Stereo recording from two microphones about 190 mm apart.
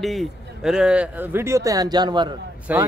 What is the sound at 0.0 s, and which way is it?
A man's voice, centre (ahead or behind).